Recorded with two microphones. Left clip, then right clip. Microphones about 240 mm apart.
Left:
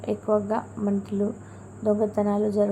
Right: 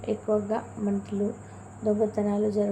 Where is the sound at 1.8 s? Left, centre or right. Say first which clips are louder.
Left 2 dB; centre.